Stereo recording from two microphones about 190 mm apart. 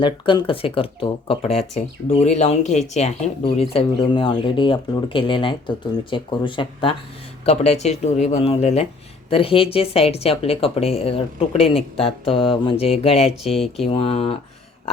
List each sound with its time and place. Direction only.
0.0 s speech: 25° left (ahead or behind)
13.4 s speech: centre (ahead or behind)
13.9 s speech: 30° left (ahead or behind)